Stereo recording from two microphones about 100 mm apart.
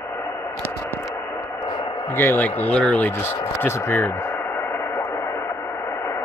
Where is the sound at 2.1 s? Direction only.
20° left (ahead or behind).